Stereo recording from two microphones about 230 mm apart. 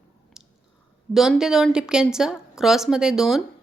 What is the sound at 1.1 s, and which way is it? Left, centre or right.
A woman's voice, centre.